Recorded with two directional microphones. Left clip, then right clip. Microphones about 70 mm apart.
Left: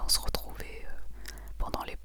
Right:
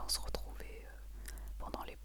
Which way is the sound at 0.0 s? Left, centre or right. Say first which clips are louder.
Left 9 dB; left.